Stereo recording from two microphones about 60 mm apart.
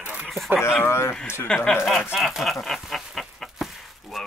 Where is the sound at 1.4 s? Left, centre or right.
Centre.